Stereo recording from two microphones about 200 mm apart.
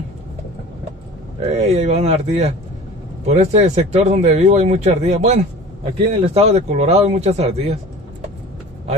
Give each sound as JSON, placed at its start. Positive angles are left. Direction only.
{"t": 1.4, "sound": "speech", "side_deg": -30}